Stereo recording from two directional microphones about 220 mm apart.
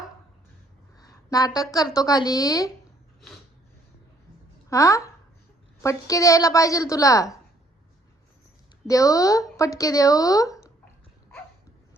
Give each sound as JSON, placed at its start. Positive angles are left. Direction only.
{"t": 0.9, "sound": "a sound", "side_deg": 15}
{"t": 2.0, "sound": "speech", "side_deg": 15}
{"t": 4.7, "sound": "speech", "side_deg": 15}
{"t": 8.9, "sound": "speech", "side_deg": 15}